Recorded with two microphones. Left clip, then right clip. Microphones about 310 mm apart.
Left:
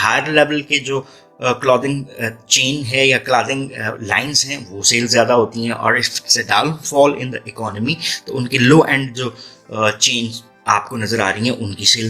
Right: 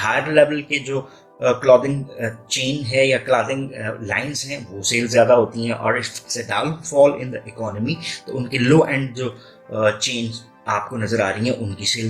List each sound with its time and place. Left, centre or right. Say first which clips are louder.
0.0 s speech: left 2 dB; left